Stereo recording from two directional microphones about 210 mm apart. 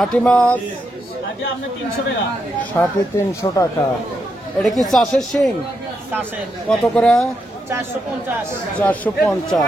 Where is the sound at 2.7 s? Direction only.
15° left (ahead or behind).